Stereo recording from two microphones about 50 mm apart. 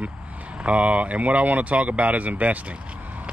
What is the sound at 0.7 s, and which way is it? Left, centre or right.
Speech, right.